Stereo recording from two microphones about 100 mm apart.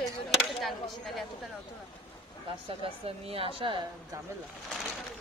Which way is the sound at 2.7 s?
75° right (ahead or behind).